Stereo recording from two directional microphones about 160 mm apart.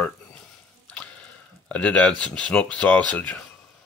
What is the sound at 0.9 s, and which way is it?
Squish, 10° left (ahead or behind).